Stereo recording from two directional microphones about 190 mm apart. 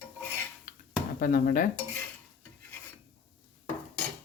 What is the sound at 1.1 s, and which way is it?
Speech, 50° left (ahead or behind).